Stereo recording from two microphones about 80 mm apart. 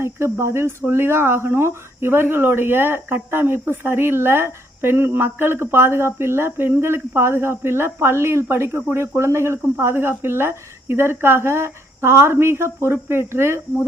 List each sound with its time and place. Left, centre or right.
0.0 s speech: right